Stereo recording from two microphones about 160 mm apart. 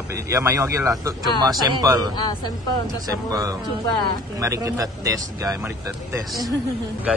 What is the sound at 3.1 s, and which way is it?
Speech, 25° right (ahead or behind).